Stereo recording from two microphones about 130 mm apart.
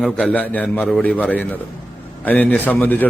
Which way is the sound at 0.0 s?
5° left (ahead or behind).